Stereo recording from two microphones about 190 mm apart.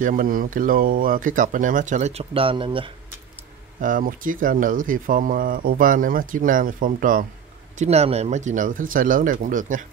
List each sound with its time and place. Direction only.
0.0 s speech: 45° right (ahead or behind); by 2.9 s 25° right (ahead or behind)
3.8 s speech: 45° right (ahead or behind)
7.8 s speech: 35° right (ahead or behind)